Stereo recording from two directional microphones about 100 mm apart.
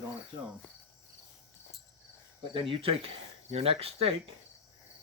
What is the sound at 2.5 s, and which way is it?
Speech, 65° right (ahead or behind).